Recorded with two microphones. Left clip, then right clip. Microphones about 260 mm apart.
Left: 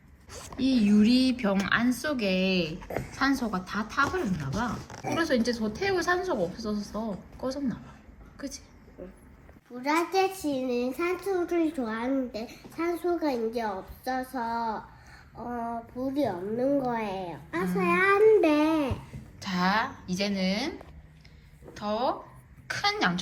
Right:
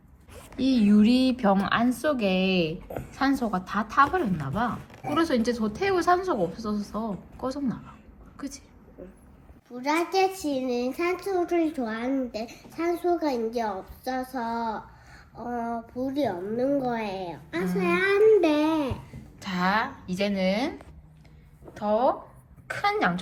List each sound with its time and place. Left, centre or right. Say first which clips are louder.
0.3 s a sound: left 3 dB; left
0.6 s a child's voice: right 2 dB; centre
9.7 s a child's voice: right 1 dB; centre
21.8 s a child's voice: right 5 dB; centre